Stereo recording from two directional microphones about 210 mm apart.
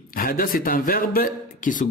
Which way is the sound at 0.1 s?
40° left (ahead or behind).